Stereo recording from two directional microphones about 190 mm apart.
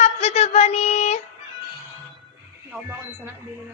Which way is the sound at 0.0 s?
35° left (ahead or behind).